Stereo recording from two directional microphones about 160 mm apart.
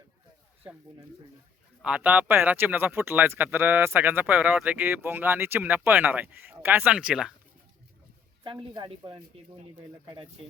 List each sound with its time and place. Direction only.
1.8 s speech: 10° right (ahead or behind)
8.4 s speech: 30° right (ahead or behind)